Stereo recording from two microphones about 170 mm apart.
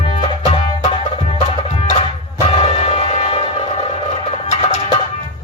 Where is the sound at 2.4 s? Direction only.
35° left (ahead or behind).